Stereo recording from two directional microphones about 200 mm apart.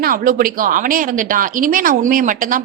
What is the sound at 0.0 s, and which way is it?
A woman's voice, 45° right (ahead or behind).